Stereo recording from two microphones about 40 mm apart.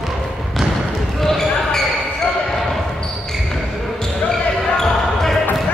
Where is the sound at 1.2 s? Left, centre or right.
Centre.